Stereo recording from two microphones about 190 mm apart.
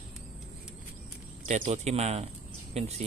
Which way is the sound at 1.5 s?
40° right (ahead or behind).